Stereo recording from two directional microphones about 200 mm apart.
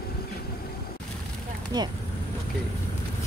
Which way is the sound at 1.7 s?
20° right (ahead or behind).